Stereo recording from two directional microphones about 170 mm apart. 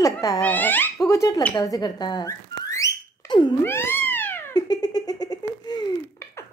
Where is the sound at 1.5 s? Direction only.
20° left (ahead or behind).